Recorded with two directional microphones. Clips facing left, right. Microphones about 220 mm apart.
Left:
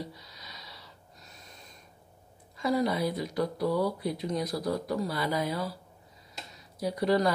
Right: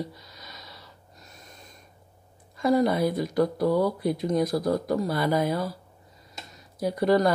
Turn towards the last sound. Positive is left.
turn(degrees=-50)  # may be behind; listen again after turning